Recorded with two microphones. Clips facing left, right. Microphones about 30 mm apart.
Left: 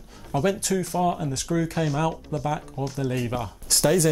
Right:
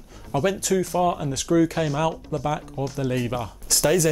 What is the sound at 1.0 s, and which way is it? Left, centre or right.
Speech, centre.